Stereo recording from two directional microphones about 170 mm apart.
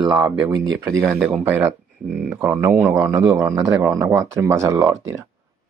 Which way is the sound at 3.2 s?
30° right (ahead or behind).